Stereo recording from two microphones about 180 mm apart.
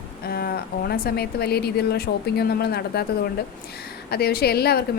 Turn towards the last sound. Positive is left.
turn(degrees=60)  # may be behind; listen again after turning